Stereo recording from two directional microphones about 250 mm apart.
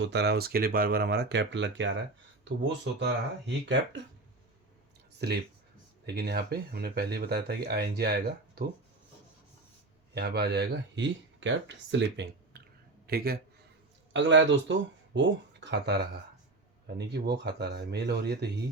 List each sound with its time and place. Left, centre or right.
0.0 s speech: right
3.0 s speech: right
5.2 s speech: right
10.2 s a man's voice: right